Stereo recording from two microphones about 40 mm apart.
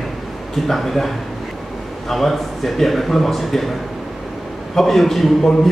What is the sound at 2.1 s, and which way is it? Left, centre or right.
A man's voice, centre.